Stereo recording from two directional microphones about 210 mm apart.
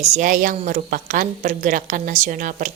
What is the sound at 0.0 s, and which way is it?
A woman's voice, 35° right (ahead or behind).